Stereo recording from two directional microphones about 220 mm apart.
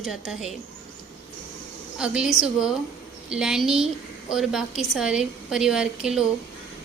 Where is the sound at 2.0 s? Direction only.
5° right (ahead or behind).